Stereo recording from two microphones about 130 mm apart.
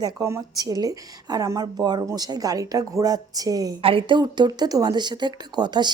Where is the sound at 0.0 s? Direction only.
25° right (ahead or behind).